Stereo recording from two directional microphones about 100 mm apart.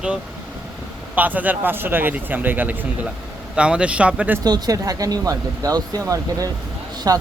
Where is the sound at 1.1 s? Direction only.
15° right (ahead or behind).